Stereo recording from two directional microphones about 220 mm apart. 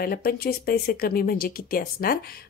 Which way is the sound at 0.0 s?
45° left (ahead or behind).